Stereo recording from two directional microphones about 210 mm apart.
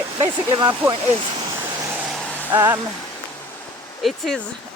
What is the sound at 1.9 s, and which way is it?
Vehicle, 5° right (ahead or behind).